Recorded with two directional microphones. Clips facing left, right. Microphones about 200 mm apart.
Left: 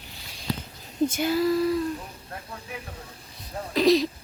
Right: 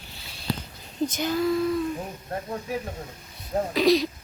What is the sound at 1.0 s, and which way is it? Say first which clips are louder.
Speech: left 2 dB; 5° left (ahead or behind).